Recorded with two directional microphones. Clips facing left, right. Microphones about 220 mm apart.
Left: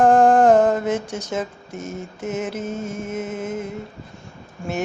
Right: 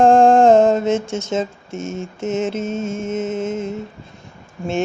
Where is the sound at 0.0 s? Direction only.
25° right (ahead or behind).